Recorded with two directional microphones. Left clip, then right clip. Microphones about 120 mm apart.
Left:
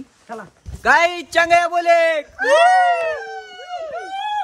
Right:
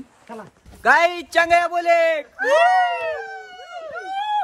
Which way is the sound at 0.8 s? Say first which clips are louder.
Left 1 dB; centre (ahead or behind).